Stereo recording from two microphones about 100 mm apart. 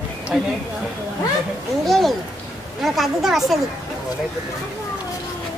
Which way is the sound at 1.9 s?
Centre (ahead or behind).